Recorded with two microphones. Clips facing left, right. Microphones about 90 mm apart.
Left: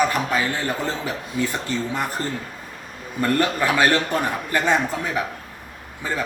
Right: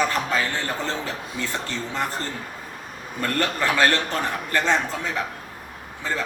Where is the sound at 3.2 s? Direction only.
10° left (ahead or behind).